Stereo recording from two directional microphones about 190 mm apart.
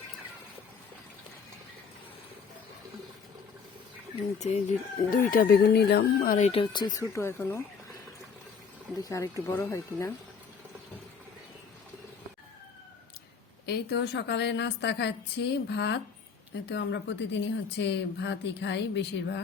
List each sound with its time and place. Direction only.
4.4 s speech: 35° left (ahead or behind)
5.1 s speech: 45° left (ahead or behind)
6.5 s speech: 25° left (ahead or behind)
9.0 s speech: 15° left (ahead or behind)
13.7 s a woman's voice: 60° left (ahead or behind)